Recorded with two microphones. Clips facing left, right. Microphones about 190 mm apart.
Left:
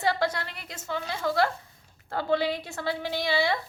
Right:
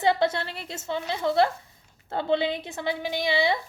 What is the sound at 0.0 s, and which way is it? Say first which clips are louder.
A woman's voice: right 4 dB; 20° right (ahead or behind).